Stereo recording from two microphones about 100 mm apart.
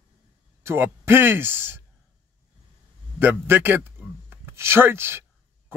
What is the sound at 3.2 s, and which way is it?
Speech, 20° right (ahead or behind).